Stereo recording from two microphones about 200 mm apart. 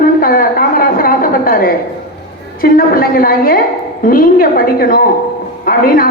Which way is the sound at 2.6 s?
45° left (ahead or behind).